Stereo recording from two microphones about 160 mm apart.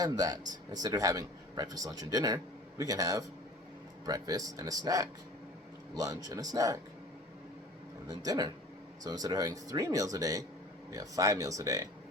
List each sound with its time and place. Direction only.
0.0 s a man's voice: 25° right (ahead or behind)
8.0 s a man's voice: 25° right (ahead or behind)